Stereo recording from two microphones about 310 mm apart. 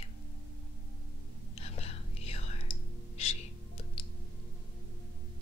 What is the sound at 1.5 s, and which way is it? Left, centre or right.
Whispering, centre.